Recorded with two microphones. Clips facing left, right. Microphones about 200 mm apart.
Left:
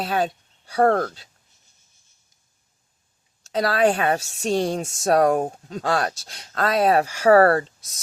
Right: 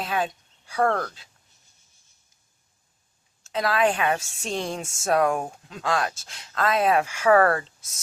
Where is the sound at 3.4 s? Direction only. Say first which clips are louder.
Left 3 dB; 35° left (ahead or behind).